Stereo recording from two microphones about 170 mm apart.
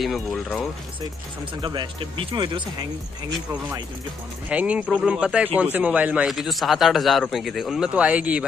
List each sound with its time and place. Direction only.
0.0 s a man's voice: centre (ahead or behind)
1.6 s speech: 25° right (ahead or behind)
4.5 s a man's voice: 5° right (ahead or behind)